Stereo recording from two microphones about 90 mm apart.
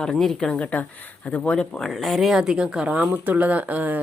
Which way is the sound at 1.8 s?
Centre (ahead or behind).